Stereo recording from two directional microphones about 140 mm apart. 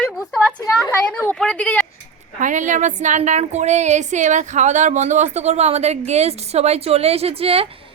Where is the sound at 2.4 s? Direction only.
60° right (ahead or behind).